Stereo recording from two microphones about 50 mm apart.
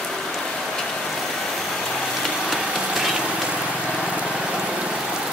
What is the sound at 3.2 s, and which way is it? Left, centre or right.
Vehicle, centre.